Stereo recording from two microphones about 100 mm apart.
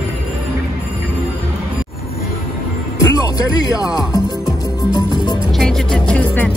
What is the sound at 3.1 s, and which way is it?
Speech, 40° left (ahead or behind).